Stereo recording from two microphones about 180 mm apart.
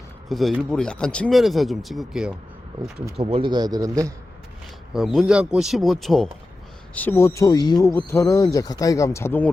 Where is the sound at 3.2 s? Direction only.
30° right (ahead or behind).